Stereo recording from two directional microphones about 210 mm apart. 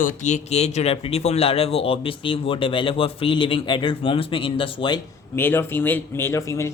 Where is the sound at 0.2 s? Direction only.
35° left (ahead or behind).